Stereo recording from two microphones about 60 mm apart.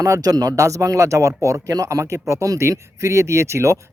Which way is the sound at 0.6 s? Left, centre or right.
Right.